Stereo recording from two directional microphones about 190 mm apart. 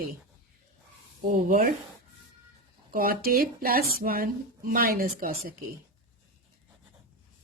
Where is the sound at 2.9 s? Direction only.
50° right (ahead or behind).